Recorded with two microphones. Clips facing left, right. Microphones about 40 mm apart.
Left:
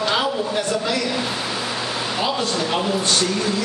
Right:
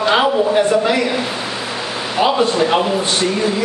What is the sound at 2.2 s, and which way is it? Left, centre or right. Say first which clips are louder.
A man's voice: right 10 dB; right.